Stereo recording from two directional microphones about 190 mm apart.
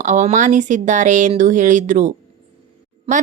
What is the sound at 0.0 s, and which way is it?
A woman's voice, 40° right (ahead or behind).